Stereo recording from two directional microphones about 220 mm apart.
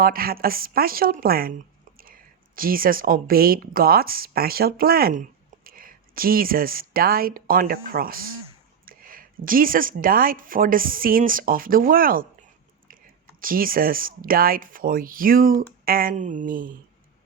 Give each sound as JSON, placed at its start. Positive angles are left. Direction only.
{"t": 0.0, "sound": "speech", "side_deg": -40}
{"t": 2.6, "sound": "speech", "side_deg": -40}
{"t": 13.4, "sound": "speech", "side_deg": -40}